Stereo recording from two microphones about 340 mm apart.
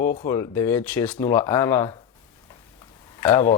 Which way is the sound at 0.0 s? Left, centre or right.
Left.